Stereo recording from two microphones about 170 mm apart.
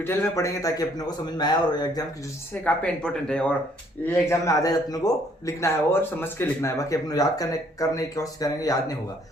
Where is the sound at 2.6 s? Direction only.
5° left (ahead or behind).